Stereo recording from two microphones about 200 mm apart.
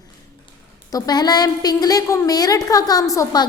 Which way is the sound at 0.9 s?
20° left (ahead or behind).